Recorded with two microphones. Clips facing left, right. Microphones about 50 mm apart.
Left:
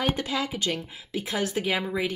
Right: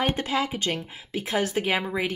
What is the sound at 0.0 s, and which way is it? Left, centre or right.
Speech, right.